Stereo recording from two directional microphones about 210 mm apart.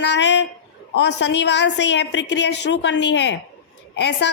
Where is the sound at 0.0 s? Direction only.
55° left (ahead or behind).